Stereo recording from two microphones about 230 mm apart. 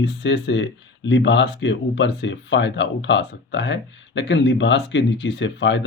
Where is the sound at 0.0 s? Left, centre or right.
Left.